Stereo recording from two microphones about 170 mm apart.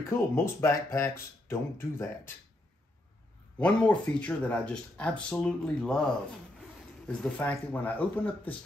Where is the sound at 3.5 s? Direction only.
5° left (ahead or behind).